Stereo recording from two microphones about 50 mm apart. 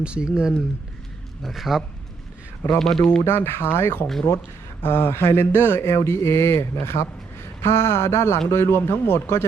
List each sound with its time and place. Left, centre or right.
0.0 s speech: right
1.4 s a man's voice: centre
2.6 s speech: centre
3.2 s a man's voice: left
5.2 s a man's voice: left
5.8 s speech: left